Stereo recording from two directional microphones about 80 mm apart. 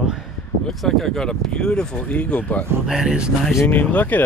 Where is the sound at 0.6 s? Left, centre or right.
Centre.